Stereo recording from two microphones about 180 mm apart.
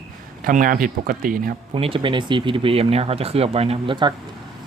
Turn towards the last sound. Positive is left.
turn(degrees=-25)  # may be behind; listen again after turning